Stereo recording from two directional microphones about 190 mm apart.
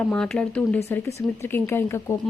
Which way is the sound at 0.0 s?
5° left (ahead or behind).